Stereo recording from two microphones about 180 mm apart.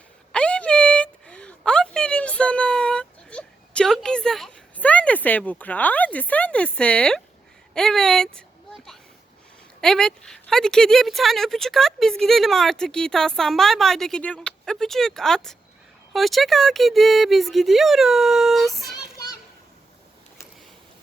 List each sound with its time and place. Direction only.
0.3 s a sound: 5° left (ahead or behind)
9.8 s a woman's voice: 5° left (ahead or behind)
19.1 s children playing: 20° left (ahead or behind)